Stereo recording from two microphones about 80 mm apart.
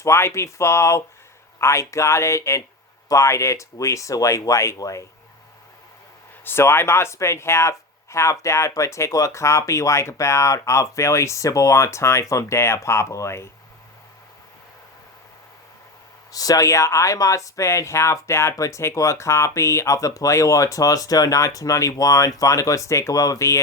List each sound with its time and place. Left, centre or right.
0.0 s speech: left
6.4 s speech: left
16.3 s speech: left